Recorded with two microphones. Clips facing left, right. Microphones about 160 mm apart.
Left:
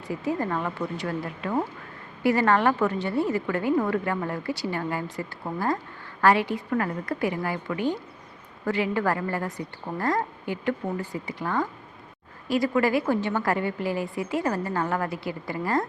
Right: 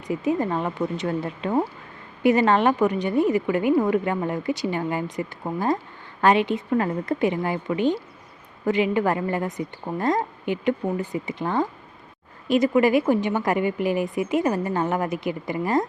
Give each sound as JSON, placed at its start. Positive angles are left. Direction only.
{"t": 0.1, "sound": "a woman's voice", "side_deg": -20}